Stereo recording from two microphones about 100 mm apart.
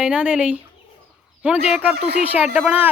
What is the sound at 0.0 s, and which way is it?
Speech, 10° right (ahead or behind).